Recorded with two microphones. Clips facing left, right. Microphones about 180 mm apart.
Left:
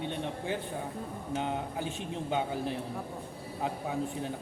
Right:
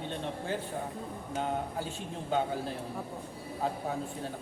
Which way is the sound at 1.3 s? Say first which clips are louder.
Even; 15° left (ahead or behind).